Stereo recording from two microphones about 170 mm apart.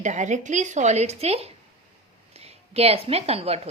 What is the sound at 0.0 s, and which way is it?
A woman's voice, 45° right (ahead or behind).